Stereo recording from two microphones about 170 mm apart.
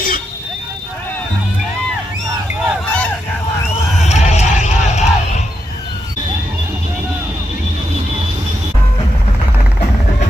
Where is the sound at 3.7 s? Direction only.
40° left (ahead or behind).